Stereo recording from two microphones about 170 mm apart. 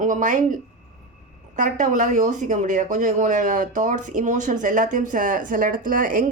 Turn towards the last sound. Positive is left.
turn(degrees=-55)  # may be behind; listen again after turning